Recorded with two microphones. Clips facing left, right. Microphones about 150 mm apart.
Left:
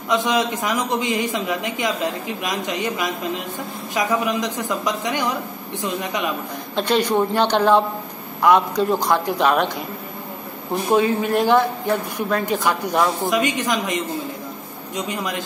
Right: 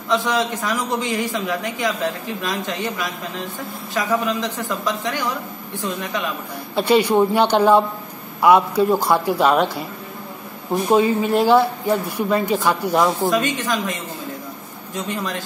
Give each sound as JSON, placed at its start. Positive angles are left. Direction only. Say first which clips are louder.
{"t": 0.1, "sound": "a man's voice", "louder": "even", "side_deg": 20}
{"t": 6.7, "sound": "a woman's voice", "louder": "right 3 dB", "side_deg": -10}
{"t": 11.1, "sound": "a woman's voice", "louder": "right 2 dB", "side_deg": -10}
{"t": 13.3, "sound": "a woman's voice", "louder": "even", "side_deg": 15}
{"t": 15.0, "sound": "a woman's voice", "louder": "even", "side_deg": 15}